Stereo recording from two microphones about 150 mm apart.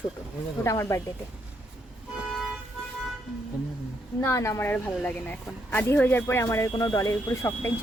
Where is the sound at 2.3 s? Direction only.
Centre (ahead or behind).